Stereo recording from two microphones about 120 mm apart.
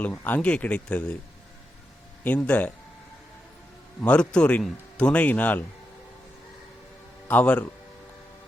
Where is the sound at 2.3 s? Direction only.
10° left (ahead or behind).